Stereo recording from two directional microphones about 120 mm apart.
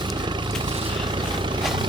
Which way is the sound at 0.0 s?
40° right (ahead or behind).